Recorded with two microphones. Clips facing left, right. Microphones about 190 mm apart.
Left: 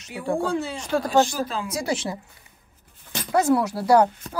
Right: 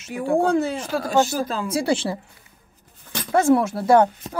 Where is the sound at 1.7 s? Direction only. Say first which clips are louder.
Right 5 dB; 30° right (ahead or behind).